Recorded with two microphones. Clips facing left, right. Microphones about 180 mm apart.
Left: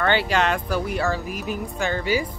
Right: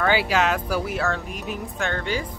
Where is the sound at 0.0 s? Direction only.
5° right (ahead or behind).